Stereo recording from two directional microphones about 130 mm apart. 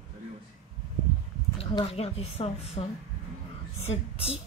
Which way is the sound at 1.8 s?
50° left (ahead or behind).